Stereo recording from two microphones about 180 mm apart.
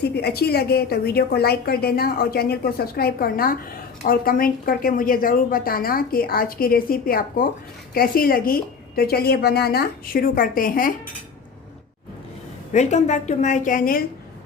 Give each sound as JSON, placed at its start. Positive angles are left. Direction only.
{"t": 0.0, "sound": "a woman's voice", "side_deg": 65}
{"t": 12.7, "sound": "a woman's voice", "side_deg": 40}